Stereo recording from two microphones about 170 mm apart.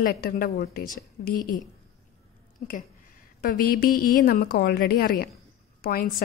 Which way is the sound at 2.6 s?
40° left (ahead or behind).